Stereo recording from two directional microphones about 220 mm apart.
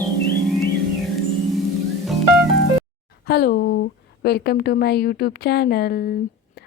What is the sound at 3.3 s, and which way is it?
A woman's voice, 45° left (ahead or behind).